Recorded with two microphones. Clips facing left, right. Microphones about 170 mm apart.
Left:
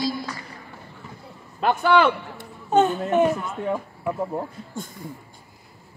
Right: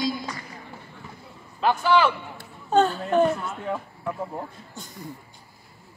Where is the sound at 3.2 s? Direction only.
Centre (ahead or behind).